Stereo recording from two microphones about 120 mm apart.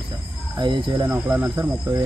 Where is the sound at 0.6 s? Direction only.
40° right (ahead or behind).